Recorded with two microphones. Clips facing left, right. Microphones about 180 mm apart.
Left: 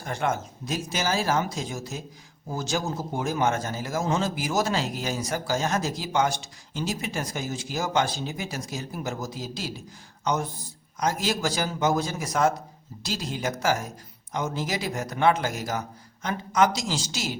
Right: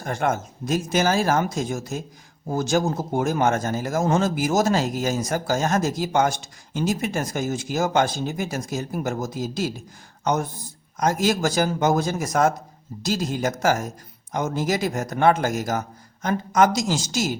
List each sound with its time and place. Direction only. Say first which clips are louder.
0.0 s a man's voice: right 4 dB; 50° right (ahead or behind)
10.9 s a man's voice: right 5 dB; 45° right (ahead or behind)